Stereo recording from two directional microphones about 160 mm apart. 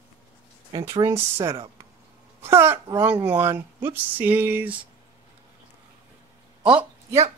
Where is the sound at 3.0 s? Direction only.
10° right (ahead or behind).